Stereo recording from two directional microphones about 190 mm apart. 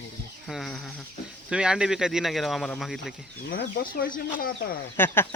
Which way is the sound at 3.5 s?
50° left (ahead or behind).